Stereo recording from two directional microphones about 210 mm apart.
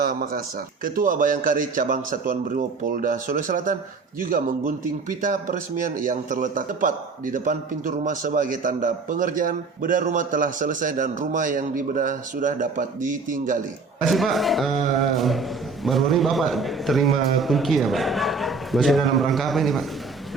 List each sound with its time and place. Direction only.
0.0 s a man's voice: 45° right (ahead or behind)
14.0 s a man's voice: centre (ahead or behind)